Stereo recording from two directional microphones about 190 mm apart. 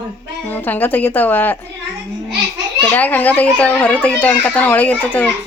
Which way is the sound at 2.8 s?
10° left (ahead or behind).